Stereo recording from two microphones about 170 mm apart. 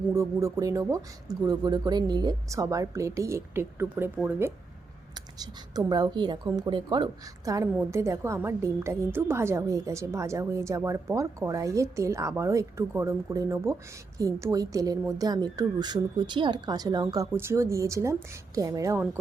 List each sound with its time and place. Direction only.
0.1 s a woman's voice: 15° right (ahead or behind)